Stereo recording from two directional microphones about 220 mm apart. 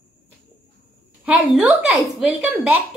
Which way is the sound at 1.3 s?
5° right (ahead or behind).